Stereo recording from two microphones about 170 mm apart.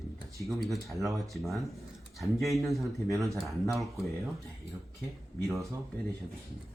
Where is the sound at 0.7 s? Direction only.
Centre (ahead or behind).